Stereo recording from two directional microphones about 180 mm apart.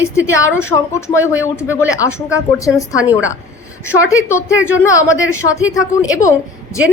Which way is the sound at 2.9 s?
5° right (ahead or behind).